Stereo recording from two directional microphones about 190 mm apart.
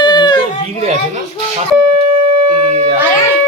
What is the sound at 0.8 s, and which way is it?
Speech, 35° right (ahead or behind).